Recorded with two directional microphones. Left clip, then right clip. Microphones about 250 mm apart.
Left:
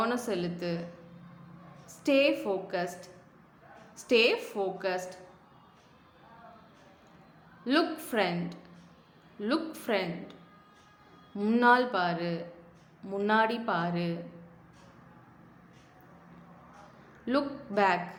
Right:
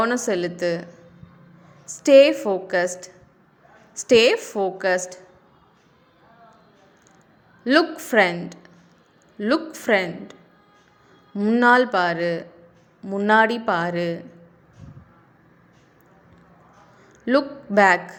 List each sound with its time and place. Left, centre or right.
0.0 s a woman's voice: right
1.9 s a woman's voice: right
7.6 s a woman's voice: right
11.3 s speech: right
17.2 s a woman's voice: right